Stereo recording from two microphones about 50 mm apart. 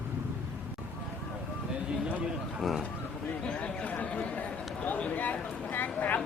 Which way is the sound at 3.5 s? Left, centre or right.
Left.